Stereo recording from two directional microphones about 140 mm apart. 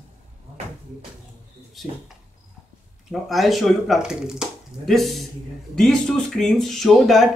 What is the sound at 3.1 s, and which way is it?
Speech, centre (ahead or behind).